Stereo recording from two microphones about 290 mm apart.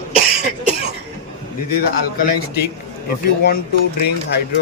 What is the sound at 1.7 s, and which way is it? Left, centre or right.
Speech, left.